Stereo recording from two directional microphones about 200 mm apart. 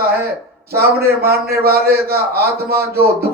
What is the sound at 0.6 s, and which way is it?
Speech, 50° right (ahead or behind).